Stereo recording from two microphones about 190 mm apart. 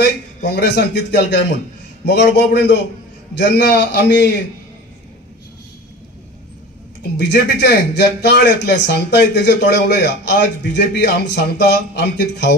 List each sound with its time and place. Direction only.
0.5 s speech: 60° left (ahead or behind)
7.2 s speech: 60° left (ahead or behind)